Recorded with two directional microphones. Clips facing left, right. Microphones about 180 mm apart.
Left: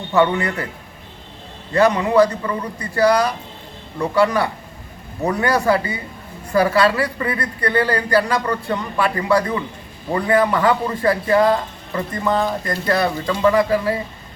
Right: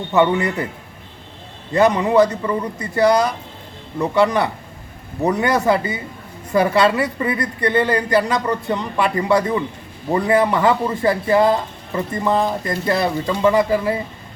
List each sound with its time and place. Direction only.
0.1 s a woman's voice: 20° right (ahead or behind)
1.7 s a woman's voice: 20° right (ahead or behind)